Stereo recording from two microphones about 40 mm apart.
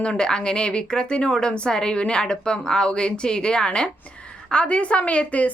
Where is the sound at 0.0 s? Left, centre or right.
Left.